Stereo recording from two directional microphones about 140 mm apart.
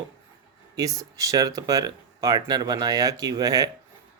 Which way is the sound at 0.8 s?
25° right (ahead or behind).